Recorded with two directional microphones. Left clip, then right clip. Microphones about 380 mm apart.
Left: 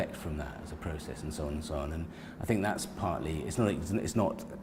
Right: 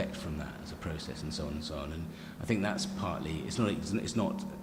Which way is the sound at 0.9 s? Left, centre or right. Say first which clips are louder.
Even; centre.